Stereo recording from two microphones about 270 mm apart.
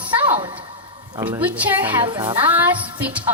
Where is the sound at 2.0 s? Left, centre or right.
Centre.